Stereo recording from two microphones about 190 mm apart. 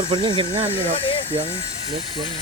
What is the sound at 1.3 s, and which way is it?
Speech, 30° right (ahead or behind).